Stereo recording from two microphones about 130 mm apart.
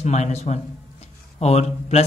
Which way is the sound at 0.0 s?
60° left (ahead or behind).